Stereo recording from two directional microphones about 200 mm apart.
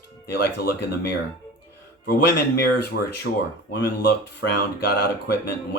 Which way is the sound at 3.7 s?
55° left (ahead or behind).